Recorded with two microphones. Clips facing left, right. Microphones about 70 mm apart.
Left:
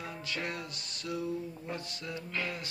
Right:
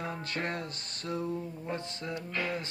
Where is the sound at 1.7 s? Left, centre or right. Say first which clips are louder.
Right 5 dB; right.